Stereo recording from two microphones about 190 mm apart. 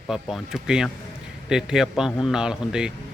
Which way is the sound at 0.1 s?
Centre (ahead or behind).